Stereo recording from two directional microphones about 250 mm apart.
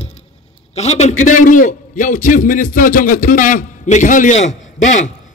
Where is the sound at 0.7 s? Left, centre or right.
Left.